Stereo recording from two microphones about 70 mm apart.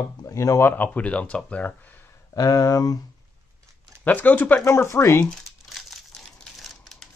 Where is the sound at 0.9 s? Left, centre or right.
Centre.